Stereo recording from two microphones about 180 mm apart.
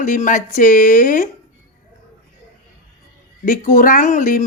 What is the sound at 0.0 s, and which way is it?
Speech, 45° left (ahead or behind).